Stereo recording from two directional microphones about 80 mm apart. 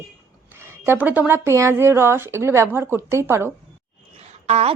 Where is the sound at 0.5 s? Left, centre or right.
Right.